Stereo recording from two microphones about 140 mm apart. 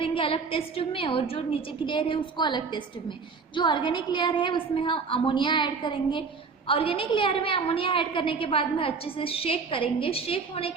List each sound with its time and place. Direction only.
0.0 s a woman's voice: 40° left (ahead or behind)